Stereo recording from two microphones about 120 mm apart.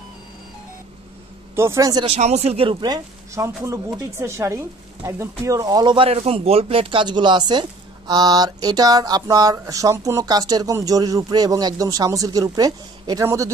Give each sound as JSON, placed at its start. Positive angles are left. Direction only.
{"t": 1.5, "sound": "speech", "side_deg": -20}
{"t": 2.0, "sound": "speech", "side_deg": -65}
{"t": 2.8, "sound": "a sound", "side_deg": -35}
{"t": 3.4, "sound": "speech", "side_deg": -25}
{"t": 5.9, "sound": "speech", "side_deg": -55}
{"t": 8.1, "sound": "a sound", "side_deg": -35}
{"t": 13.2, "sound": "speech", "side_deg": -25}